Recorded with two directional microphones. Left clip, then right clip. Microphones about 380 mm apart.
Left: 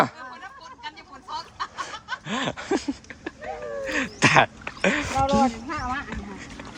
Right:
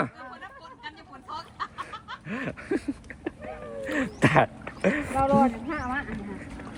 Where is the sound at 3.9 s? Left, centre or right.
Centre.